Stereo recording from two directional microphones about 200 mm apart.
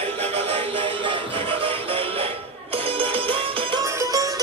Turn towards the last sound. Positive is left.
turn(degrees=-15)  # may be behind; listen again after turning